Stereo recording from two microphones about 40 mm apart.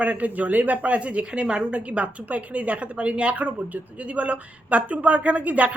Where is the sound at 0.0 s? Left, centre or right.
Right.